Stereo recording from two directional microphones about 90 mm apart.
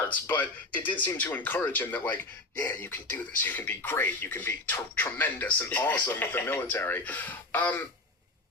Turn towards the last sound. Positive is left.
turn(degrees=20)  # may be behind; listen again after turning